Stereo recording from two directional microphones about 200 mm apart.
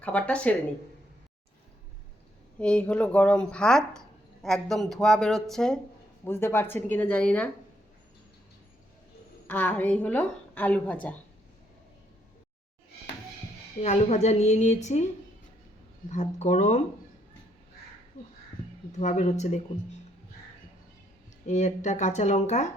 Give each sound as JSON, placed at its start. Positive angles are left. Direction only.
{"t": 0.0, "sound": "a woman's voice", "side_deg": 5}
{"t": 2.6, "sound": "a woman's voice", "side_deg": 5}
{"t": 9.5, "sound": "a woman's voice", "side_deg": 10}
{"t": 13.8, "sound": "a woman's voice", "side_deg": 35}
{"t": 18.9, "sound": "a woman's voice", "side_deg": 35}
{"t": 21.4, "sound": "a woman's voice", "side_deg": 35}